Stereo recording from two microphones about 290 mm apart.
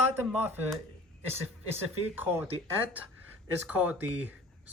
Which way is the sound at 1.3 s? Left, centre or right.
Right.